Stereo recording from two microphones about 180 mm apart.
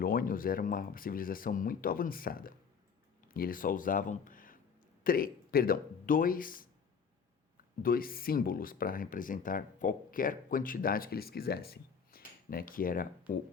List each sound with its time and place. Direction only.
0.0 s speech: 55° left (ahead or behind)
7.8 s speech: 55° left (ahead or behind)